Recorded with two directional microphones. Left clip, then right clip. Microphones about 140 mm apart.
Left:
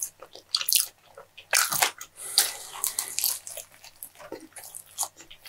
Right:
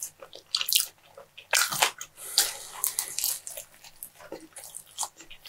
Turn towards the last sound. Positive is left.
turn(degrees=45)  # may be behind; listen again after turning